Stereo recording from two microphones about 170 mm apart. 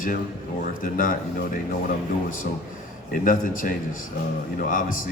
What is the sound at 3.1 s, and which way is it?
Speech, 50° left (ahead or behind).